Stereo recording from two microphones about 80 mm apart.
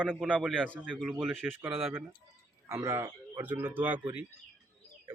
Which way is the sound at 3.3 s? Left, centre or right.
Right.